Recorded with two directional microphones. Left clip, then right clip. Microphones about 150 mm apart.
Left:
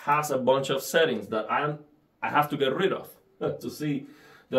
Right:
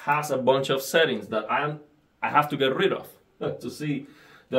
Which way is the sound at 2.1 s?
20° right (ahead or behind).